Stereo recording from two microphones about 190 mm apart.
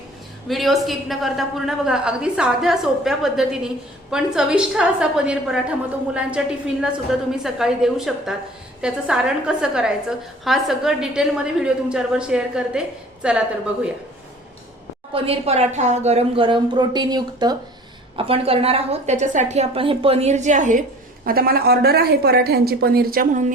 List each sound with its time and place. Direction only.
0.4 s a woman's voice: centre (ahead or behind)
15.1 s a woman's voice: 30° right (ahead or behind)
21.2 s a woman's voice: 50° right (ahead or behind)